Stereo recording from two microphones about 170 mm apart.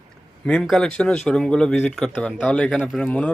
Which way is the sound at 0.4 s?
5° left (ahead or behind).